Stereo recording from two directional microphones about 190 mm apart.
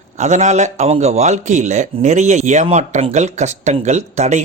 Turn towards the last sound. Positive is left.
turn(degrees=-35)  # may be behind; listen again after turning